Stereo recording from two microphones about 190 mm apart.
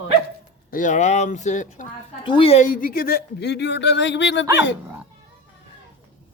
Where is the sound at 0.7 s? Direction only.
40° left (ahead or behind).